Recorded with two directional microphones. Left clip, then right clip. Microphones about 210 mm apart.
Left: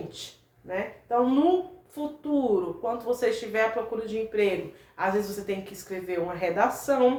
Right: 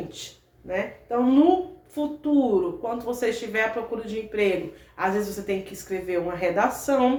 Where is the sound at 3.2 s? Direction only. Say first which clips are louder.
Right 2 dB; 5° right (ahead or behind).